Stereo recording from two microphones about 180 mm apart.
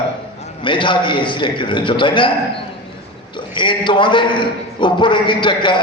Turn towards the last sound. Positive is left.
turn(degrees=25)  # may be behind; listen again after turning